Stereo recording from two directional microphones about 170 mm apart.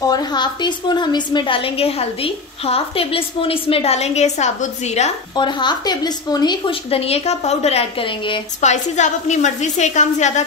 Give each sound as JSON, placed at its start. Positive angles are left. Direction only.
{"t": 0.0, "sound": "a woman's voice", "side_deg": 25}
{"t": 5.3, "sound": "a woman's voice", "side_deg": 25}